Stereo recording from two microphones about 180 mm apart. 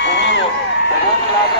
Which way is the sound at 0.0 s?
75° left (ahead or behind).